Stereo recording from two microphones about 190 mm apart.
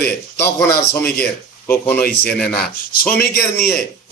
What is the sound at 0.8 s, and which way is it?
Speech, 10° left (ahead or behind).